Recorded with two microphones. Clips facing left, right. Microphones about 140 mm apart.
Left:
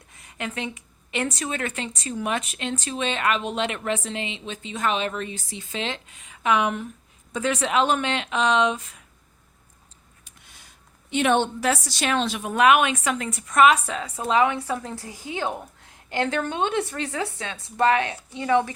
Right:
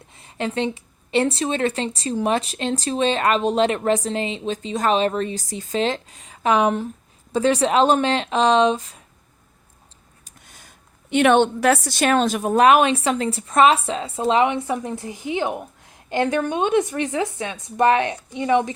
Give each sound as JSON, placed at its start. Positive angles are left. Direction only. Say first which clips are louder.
{"t": 0.1, "sound": "a woman's voice", "louder": "right 7 dB", "side_deg": -30}
{"t": 10.2, "sound": "a sound", "louder": "right 4 dB", "side_deg": -45}
{"t": 11.1, "sound": "a woman's voice", "louder": "right 6 dB", "side_deg": -65}